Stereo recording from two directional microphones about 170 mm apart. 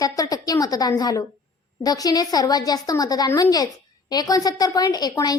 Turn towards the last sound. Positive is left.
turn(degrees=25)  # may be behind; listen again after turning